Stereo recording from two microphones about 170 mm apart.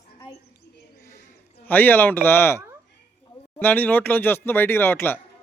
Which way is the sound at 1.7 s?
10° left (ahead or behind).